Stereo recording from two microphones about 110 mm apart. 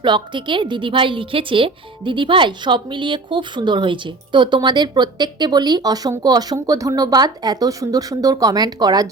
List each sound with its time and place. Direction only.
0.0 s a woman's voice: 45° right (ahead or behind)